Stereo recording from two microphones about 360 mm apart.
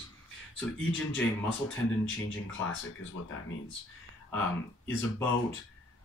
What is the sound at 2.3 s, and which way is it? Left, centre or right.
Speech, left.